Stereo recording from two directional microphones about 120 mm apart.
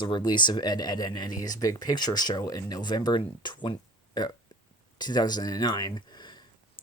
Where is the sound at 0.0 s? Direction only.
40° left (ahead or behind).